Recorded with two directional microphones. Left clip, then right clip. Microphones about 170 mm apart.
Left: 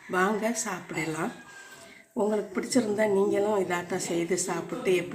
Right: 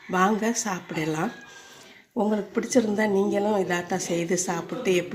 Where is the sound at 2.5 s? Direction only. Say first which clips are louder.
Right 3 dB; 40° right (ahead or behind).